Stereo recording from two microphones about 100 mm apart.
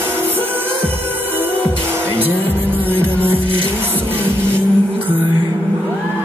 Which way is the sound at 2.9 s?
20° right (ahead or behind).